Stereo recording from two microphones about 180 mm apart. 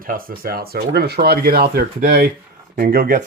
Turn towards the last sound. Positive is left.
turn(degrees=-55)  # may be behind; listen again after turning